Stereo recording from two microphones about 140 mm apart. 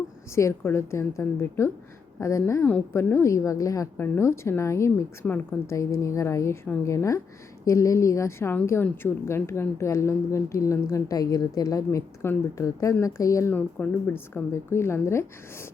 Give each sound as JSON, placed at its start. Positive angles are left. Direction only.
{"t": 0.3, "sound": "a woman's voice", "side_deg": 20}
{"t": 13.5, "sound": "a woman's voice", "side_deg": 10}